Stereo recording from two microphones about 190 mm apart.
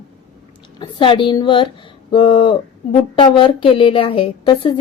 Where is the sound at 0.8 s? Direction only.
25° left (ahead or behind).